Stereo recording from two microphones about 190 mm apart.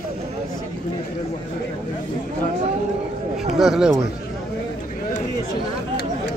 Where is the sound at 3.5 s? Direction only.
Centre (ahead or behind).